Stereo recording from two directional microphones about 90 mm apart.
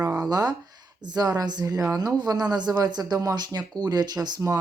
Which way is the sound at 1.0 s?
50° right (ahead or behind).